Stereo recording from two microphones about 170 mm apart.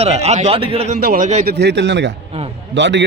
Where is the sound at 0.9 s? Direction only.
60° right (ahead or behind).